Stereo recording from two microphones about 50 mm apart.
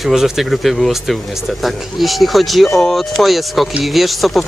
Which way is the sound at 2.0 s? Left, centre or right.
Centre.